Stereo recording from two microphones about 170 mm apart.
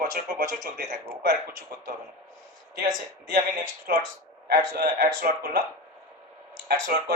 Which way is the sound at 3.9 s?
65° right (ahead or behind).